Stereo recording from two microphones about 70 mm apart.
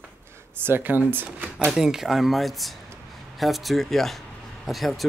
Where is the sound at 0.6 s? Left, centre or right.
Right.